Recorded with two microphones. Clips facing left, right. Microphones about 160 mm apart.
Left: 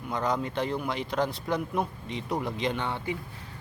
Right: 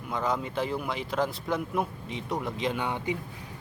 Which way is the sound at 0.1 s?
Centre (ahead or behind).